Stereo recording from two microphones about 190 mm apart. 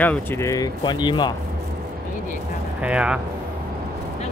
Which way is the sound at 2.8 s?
5° right (ahead or behind).